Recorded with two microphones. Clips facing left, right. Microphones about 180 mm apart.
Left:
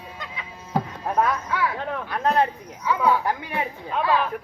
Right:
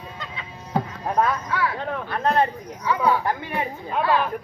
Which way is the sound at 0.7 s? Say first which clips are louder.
Right 1 dB; 5° left (ahead or behind).